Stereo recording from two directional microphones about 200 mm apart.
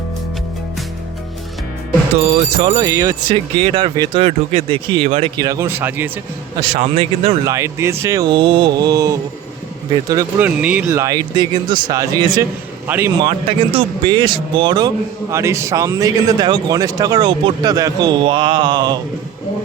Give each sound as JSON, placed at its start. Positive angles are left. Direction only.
{"t": 2.6, "sound": "speech", "side_deg": -20}
{"t": 5.4, "sound": "speech", "side_deg": -15}
{"t": 6.6, "sound": "speech", "side_deg": -30}
{"t": 7.4, "sound": "speech", "side_deg": -15}
{"t": 12.9, "sound": "speech", "side_deg": -10}
{"t": 13.2, "sound": "speech", "side_deg": -25}